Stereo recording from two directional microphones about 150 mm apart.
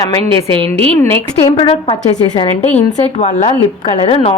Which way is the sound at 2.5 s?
50° left (ahead or behind).